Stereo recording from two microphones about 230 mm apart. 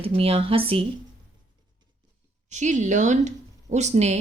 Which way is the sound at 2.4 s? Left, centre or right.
Right.